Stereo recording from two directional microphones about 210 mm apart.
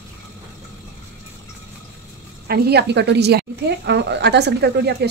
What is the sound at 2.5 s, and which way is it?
Speech, 50° right (ahead or behind).